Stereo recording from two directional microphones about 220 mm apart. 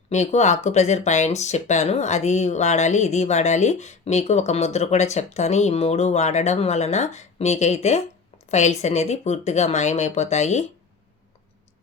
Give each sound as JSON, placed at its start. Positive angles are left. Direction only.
{"t": 0.1, "sound": "a woman's voice", "side_deg": 30}